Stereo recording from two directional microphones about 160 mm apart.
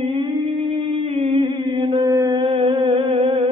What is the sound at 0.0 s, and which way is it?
Humming, 35° right (ahead or behind).